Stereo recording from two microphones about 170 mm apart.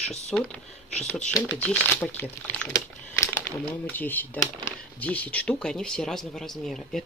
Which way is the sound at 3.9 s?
10° left (ahead or behind).